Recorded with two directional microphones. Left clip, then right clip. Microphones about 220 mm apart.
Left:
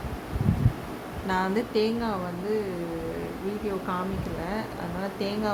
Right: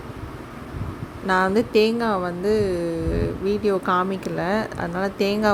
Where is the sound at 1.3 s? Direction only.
30° right (ahead or behind).